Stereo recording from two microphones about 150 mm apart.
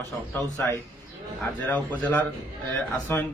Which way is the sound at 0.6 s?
15° left (ahead or behind).